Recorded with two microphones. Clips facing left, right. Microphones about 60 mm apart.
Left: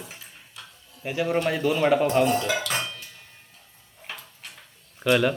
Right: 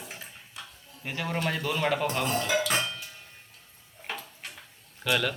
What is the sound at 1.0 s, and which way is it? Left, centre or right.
A man's voice, centre.